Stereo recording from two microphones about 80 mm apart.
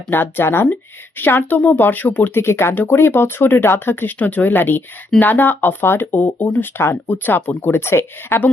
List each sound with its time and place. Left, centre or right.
0.1 s a woman's voice: left